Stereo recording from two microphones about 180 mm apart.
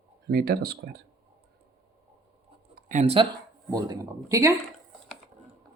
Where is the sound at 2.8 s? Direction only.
45° right (ahead or behind).